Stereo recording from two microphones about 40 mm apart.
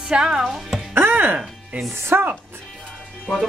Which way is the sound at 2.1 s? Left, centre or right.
Right.